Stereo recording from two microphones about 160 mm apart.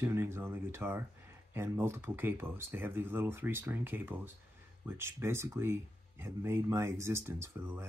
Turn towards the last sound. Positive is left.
turn(degrees=-15)  # may be behind; listen again after turning